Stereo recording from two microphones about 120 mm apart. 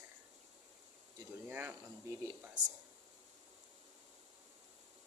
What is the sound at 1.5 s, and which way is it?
Speech, 20° right (ahead or behind).